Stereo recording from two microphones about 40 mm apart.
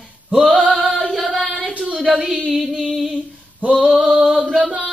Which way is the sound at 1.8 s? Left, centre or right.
Right.